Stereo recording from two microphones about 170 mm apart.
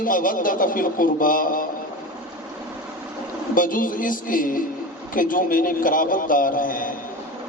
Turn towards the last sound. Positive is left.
turn(degrees=55)  # may be behind; listen again after turning